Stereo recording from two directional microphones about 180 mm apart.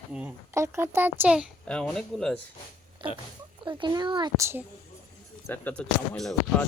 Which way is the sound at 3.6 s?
25° right (ahead or behind).